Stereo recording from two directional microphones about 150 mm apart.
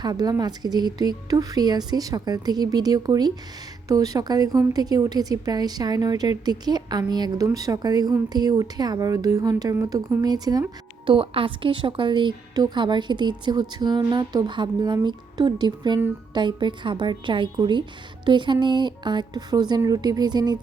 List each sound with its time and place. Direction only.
0.0 s speech: 25° right (ahead or behind)